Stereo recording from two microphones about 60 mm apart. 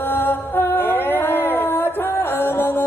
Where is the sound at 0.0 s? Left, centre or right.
Left.